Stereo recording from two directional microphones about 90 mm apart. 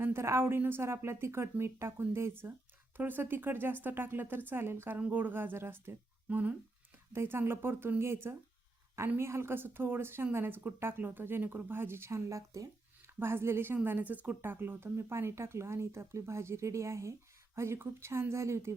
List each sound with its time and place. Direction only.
0.0 s speech: 30° right (ahead or behind)
4.9 s speech: 15° right (ahead or behind); by 18.8 s 30° right (ahead or behind)